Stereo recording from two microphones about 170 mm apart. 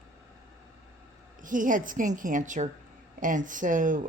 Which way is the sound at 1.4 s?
50° right (ahead or behind).